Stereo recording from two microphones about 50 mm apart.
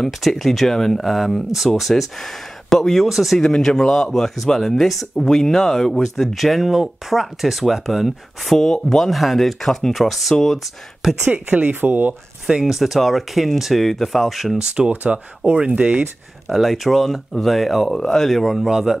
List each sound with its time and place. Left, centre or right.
0.2 s speech: centre
3.3 s speech: centre
11.2 s speech: right
12.4 s speech: centre
12.7 s speech: centre
14.6 s speech: centre
16.4 s speech: centre